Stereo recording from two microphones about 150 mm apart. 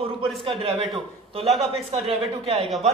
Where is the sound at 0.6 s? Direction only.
40° right (ahead or behind).